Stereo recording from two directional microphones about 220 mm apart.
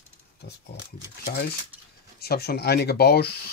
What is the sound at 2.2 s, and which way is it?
Speech, 45° left (ahead or behind).